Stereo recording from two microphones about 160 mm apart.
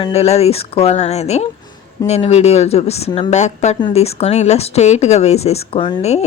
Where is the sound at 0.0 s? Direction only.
40° left (ahead or behind).